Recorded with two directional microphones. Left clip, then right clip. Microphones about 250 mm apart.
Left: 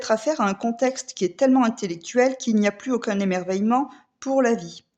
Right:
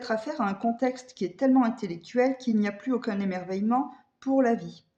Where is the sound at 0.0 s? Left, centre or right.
Left.